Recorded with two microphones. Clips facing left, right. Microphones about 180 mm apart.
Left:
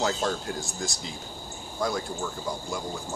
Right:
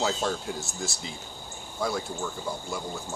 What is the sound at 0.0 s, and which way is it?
Speech, centre (ahead or behind).